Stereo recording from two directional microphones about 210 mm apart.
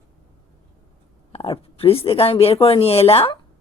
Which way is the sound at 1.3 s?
25° left (ahead or behind).